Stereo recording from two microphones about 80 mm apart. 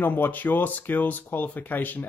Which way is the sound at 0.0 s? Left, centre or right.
Left.